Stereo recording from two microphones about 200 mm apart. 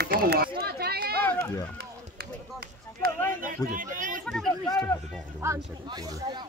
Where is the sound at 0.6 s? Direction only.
50° right (ahead or behind).